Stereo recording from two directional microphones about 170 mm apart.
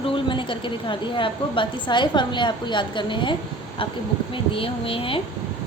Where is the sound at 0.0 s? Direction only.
30° left (ahead or behind).